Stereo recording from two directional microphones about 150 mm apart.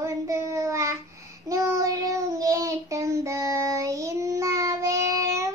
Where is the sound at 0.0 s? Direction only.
20° right (ahead or behind).